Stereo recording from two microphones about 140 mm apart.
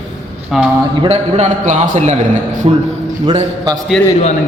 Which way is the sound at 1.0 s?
50° right (ahead or behind).